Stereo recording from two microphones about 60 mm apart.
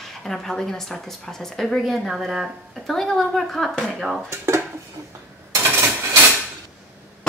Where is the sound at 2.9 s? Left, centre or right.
Centre.